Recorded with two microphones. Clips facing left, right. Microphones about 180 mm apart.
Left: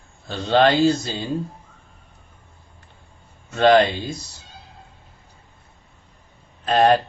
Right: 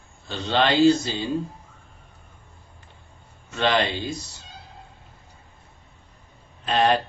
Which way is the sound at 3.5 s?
45° left (ahead or behind).